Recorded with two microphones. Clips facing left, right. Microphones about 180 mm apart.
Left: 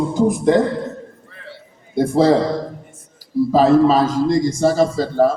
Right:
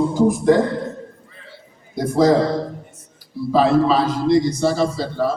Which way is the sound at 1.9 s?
30° left (ahead or behind).